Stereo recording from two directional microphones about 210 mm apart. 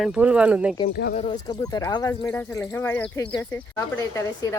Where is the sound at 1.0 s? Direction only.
50° left (ahead or behind).